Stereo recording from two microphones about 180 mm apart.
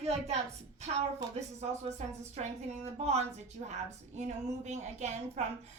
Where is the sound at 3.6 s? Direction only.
40° right (ahead or behind).